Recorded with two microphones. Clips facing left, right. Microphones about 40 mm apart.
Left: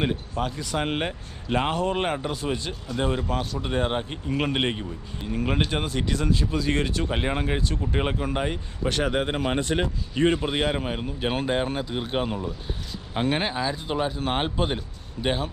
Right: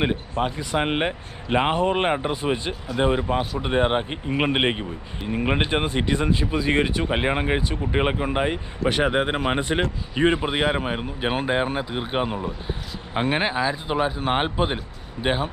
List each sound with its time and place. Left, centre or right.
0.0 s speech: right